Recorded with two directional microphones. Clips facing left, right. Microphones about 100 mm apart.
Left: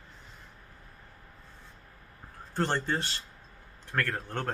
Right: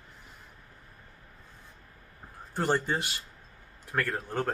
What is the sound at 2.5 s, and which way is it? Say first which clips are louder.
Speech: right 1 dB; 10° right (ahead or behind).